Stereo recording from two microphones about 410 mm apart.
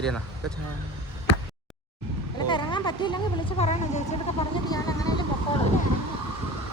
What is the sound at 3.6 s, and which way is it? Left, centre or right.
Speech, centre.